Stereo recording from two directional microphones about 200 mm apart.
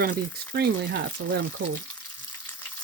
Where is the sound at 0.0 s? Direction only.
50° right (ahead or behind).